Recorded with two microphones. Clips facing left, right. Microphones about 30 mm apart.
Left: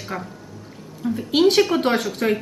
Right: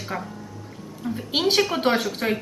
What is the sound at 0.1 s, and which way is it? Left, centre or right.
A woman's voice, centre.